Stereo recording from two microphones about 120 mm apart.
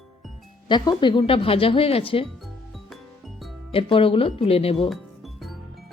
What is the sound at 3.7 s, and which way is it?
Speech, 50° left (ahead or behind).